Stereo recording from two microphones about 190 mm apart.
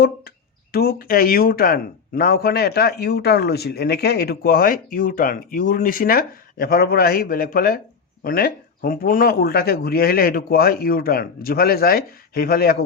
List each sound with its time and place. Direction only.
0.7 s speech: 50° left (ahead or behind)